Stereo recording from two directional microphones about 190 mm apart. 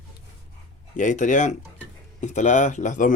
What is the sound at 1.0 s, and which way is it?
Speech, 40° left (ahead or behind).